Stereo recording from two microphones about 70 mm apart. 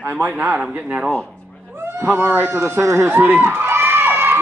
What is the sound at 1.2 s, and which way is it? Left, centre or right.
Speech, right.